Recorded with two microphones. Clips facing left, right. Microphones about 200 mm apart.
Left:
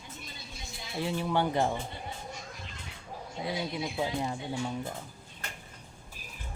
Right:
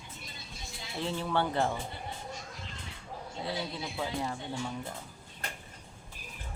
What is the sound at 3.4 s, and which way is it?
Speech, 15° left (ahead or behind).